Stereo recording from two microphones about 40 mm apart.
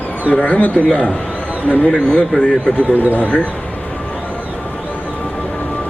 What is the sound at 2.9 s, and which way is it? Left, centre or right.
Speech, right.